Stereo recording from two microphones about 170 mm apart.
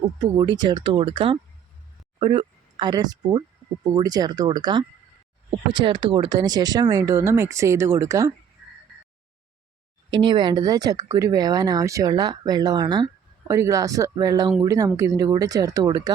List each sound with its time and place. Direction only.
0.2 s speech: 25° right (ahead or behind)
10.1 s speech: 30° right (ahead or behind)